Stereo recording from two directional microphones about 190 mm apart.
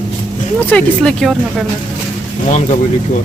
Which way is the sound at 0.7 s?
5° left (ahead or behind).